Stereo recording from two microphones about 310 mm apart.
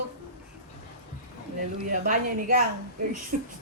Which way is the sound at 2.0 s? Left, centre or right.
Right.